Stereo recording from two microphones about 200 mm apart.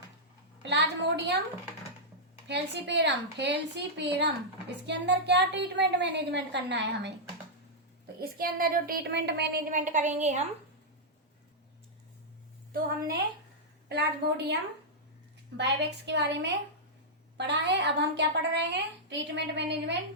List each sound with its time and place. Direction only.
0.6 s a sound: 60° right (ahead or behind)
2.5 s a woman's voice: 60° right (ahead or behind)
8.2 s speech: 45° right (ahead or behind)
9.7 s a woman's voice: 40° right (ahead or behind)
13.8 s a woman's voice: 55° right (ahead or behind)